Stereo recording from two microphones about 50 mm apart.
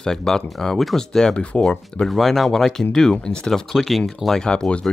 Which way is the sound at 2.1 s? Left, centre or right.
Centre.